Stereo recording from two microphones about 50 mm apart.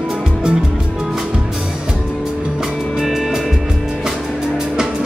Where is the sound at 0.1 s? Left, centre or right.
Centre.